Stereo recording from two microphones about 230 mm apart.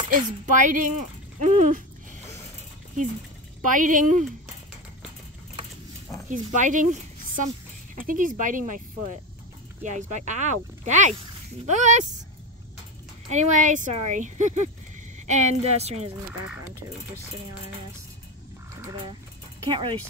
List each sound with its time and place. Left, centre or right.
0.1 s speech: right
3.6 s speech: right
6.3 s speech: right
9.8 s speech: right
13.3 s a woman's voice: right
19.7 s a woman's voice: right